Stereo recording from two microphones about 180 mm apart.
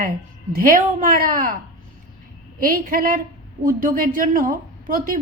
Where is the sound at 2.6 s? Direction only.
50° right (ahead or behind).